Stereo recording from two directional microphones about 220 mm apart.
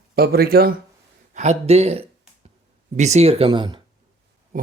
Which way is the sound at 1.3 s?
30° right (ahead or behind).